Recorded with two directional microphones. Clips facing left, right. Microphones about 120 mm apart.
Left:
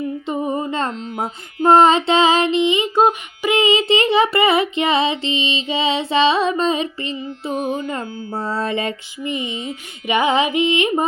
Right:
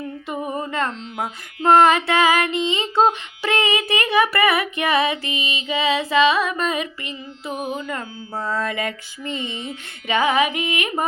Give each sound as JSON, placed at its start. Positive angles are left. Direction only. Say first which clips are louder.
{"t": 0.3, "sound": "humming", "louder": "left 3 dB", "side_deg": 25}
{"t": 1.0, "sound": "carnatic music", "louder": "left 3 dB", "side_deg": 40}
{"t": 1.6, "sound": "music", "louder": "left 2 dB", "side_deg": 20}
{"t": 9.2, "sound": "music", "louder": "left 4 dB", "side_deg": 15}